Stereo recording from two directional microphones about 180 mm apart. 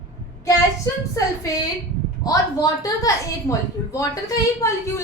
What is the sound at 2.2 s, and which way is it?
A woman's voice, 20° left (ahead or behind).